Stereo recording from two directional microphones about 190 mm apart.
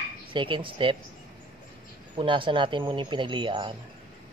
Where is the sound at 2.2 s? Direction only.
25° right (ahead or behind).